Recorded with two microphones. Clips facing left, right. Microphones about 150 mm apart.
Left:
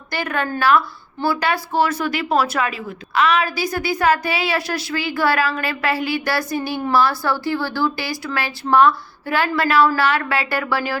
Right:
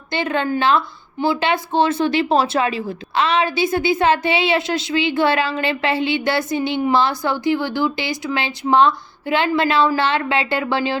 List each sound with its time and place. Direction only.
0.1 s a woman's voice: 25° right (ahead or behind)